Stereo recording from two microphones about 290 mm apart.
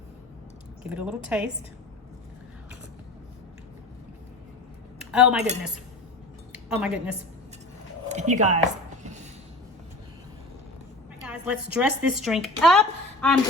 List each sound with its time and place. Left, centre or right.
0.9 s a woman's voice: centre
5.1 s a woman's voice: centre
6.5 s speech: centre
8.1 s speech: right
11.2 s a woman's voice: centre